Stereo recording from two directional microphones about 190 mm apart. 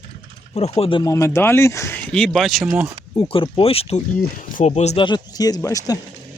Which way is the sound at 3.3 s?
30° left (ahead or behind).